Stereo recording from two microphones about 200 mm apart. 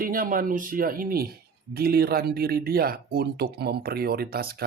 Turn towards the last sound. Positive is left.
turn(degrees=-50)  # may be behind; listen again after turning